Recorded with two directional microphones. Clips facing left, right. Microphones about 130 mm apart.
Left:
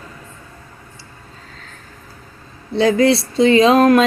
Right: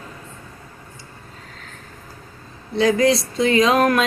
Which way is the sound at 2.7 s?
30° left (ahead or behind).